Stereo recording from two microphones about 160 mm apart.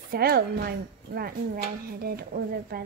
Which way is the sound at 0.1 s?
70° right (ahead or behind).